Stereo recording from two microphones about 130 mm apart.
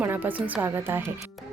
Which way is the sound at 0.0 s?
15° right (ahead or behind).